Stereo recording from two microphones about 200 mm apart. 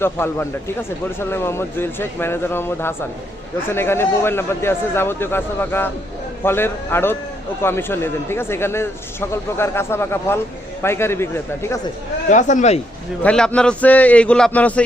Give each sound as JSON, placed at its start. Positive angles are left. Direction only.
{"t": 0.0, "sound": "speech", "side_deg": 10}
{"t": 12.3, "sound": "speech", "side_deg": 35}
{"t": 13.2, "sound": "speech", "side_deg": 5}